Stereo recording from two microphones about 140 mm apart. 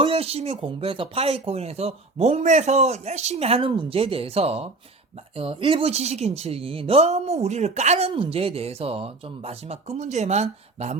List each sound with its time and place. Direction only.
0.0 s speech: 40° right (ahead or behind)